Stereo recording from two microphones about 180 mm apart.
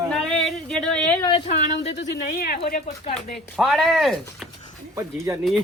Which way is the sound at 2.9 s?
40° left (ahead or behind).